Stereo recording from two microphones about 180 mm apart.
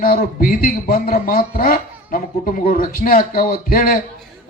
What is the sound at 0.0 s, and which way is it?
A man's voice, 55° left (ahead or behind).